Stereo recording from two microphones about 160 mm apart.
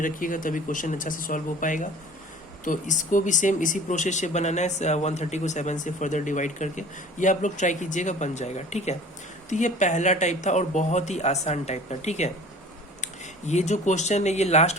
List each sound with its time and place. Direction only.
0.0 s speech: 55° left (ahead or behind)